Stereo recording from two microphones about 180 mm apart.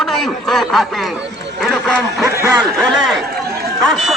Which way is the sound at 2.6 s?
Centre (ahead or behind).